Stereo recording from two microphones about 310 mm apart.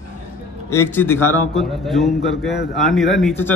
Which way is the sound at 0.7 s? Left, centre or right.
Centre.